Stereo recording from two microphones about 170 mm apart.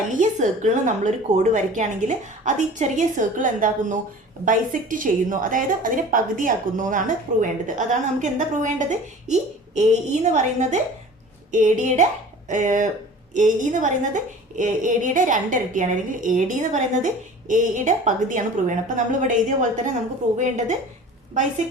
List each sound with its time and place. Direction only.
0.2 s a woman's voice: 45° right (ahead or behind)